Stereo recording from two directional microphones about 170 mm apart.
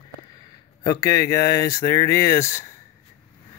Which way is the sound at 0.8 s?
20° left (ahead or behind).